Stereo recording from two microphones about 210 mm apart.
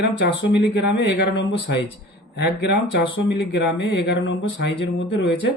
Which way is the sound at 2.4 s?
55° left (ahead or behind).